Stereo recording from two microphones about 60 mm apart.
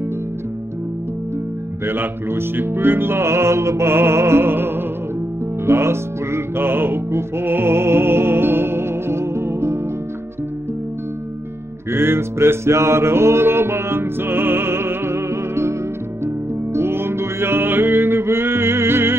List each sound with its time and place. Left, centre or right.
1.9 s speech: right
5.7 s music: right
11.9 s music: right
16.7 s music: right